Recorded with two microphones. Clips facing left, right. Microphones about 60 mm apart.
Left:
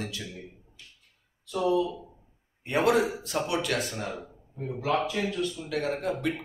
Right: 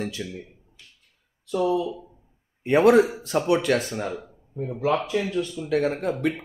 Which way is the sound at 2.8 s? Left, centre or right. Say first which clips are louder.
Right 7 dB; right.